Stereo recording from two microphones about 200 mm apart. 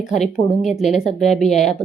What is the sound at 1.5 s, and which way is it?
Speech, 35° left (ahead or behind).